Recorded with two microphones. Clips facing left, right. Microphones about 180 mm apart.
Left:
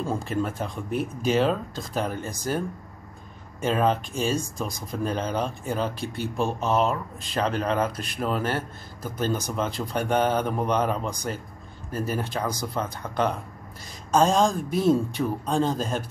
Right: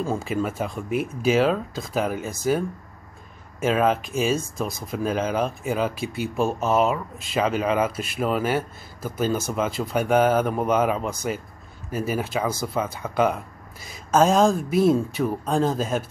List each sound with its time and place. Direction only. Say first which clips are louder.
0.3 s speech: right 2 dB; 10° right (ahead or behind)
3.6 s speech: right 2 dB; 5° right (ahead or behind)